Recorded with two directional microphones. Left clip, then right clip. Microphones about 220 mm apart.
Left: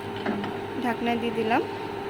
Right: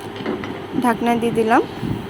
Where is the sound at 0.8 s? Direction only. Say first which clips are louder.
Right 9 dB; 20° right (ahead or behind).